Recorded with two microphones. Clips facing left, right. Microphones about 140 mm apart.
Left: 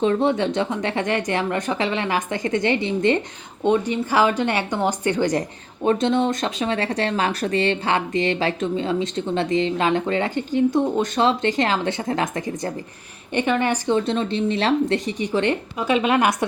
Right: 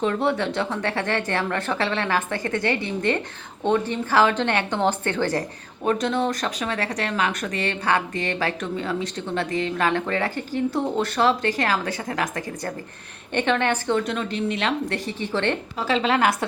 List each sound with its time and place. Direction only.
0.0 s a woman's voice: 20° left (ahead or behind)
13.3 s a woman's voice: 10° left (ahead or behind)